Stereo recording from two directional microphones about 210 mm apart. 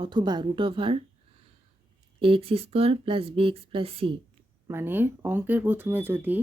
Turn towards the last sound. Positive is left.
turn(degrees=-10)  # may be behind; listen again after turning